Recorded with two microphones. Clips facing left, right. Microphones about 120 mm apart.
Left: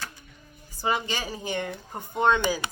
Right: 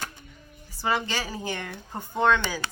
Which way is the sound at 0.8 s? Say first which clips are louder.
Even; 20° left (ahead or behind).